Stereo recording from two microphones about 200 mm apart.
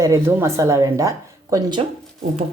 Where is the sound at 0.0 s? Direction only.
15° right (ahead or behind).